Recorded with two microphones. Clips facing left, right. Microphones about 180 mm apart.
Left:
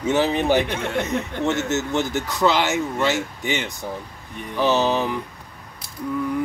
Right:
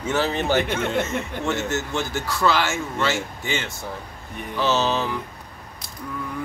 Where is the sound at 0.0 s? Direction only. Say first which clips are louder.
Left 3 dB; 15° left (ahead or behind).